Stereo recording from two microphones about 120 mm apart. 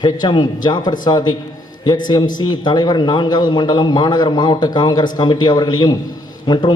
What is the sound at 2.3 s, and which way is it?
A man's voice, 35° left (ahead or behind).